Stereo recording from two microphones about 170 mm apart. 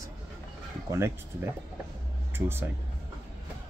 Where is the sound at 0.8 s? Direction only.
15° right (ahead or behind).